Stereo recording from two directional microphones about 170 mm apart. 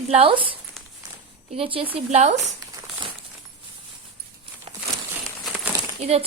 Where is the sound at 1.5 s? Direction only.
30° right (ahead or behind).